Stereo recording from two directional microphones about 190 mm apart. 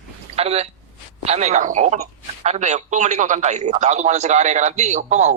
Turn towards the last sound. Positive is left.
turn(degrees=-40)  # may be behind; listen again after turning